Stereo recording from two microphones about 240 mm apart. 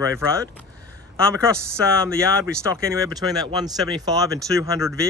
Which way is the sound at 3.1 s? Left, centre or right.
Centre.